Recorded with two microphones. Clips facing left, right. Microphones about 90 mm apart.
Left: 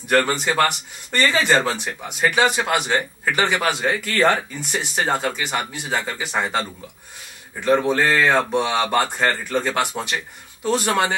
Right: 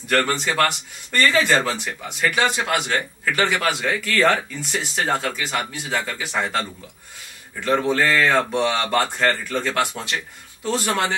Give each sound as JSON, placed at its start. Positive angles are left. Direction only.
{"t": 0.1, "sound": "speech", "side_deg": 15}
{"t": 7.6, "sound": "speech", "side_deg": 15}